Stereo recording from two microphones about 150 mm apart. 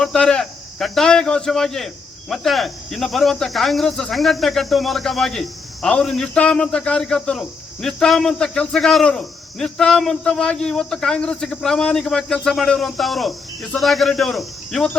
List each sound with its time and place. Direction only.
0.0 s speech: 5° left (ahead or behind)